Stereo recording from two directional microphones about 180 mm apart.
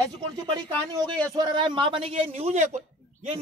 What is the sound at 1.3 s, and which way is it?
A woman's voice, 25° right (ahead or behind).